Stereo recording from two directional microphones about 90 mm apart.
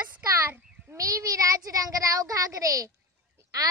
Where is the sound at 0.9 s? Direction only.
40° right (ahead or behind).